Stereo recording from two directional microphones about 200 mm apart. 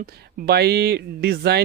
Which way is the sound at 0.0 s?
50° right (ahead or behind).